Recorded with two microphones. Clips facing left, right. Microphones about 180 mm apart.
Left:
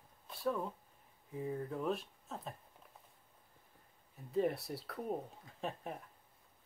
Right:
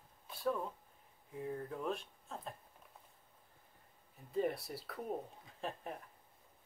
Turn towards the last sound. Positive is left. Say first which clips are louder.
# left 1 dB
turn(degrees=0)  # may be behind; listen again after turning